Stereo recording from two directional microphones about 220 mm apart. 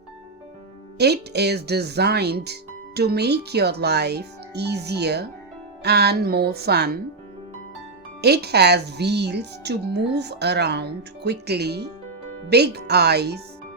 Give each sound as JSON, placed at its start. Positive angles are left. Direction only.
{"t": 0.9, "sound": "speech", "side_deg": -50}
{"t": 8.2, "sound": "speech", "side_deg": -45}